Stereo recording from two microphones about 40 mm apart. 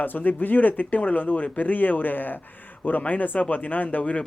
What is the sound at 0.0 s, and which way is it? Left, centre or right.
A man's voice, left.